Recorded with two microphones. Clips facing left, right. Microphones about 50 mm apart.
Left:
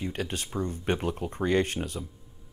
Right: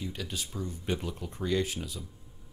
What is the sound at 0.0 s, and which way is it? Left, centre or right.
Speech, left.